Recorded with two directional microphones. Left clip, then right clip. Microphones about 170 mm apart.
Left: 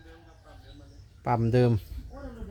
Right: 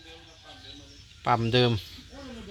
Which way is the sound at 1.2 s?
10° left (ahead or behind).